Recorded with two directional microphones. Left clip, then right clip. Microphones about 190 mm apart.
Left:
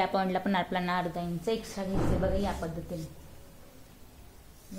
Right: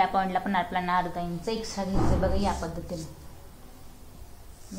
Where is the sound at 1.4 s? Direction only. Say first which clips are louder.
Left 1 dB; 40° left (ahead or behind).